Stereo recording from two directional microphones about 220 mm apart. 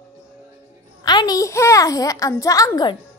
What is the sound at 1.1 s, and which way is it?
A child's voice, 20° left (ahead or behind).